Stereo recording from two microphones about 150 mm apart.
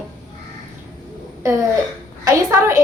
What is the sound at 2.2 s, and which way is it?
Speech, 20° right (ahead or behind).